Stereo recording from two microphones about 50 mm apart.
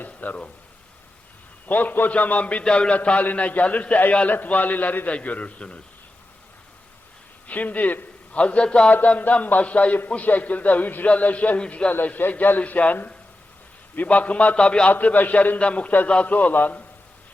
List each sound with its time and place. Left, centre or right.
0.0 s a sound: left
1.6 s a man's voice: left
7.4 s a man's voice: left
8.9 s a man's voice: left
12.0 s a man's voice: left
14.8 s a man's voice: left